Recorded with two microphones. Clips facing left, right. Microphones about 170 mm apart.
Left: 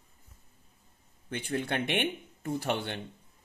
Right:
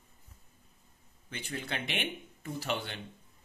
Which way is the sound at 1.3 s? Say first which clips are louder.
Left 7 dB; 55° left (ahead or behind).